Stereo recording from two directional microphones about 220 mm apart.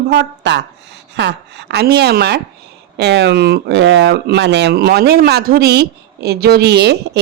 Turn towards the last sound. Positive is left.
turn(degrees=-50)  # may be behind; listen again after turning